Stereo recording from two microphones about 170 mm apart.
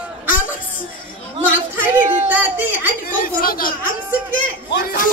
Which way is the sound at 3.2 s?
60° left (ahead or behind).